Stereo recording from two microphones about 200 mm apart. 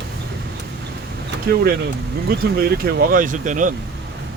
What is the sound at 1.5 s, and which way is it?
Speech, 50° right (ahead or behind).